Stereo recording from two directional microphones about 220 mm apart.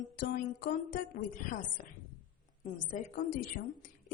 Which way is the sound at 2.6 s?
35° left (ahead or behind).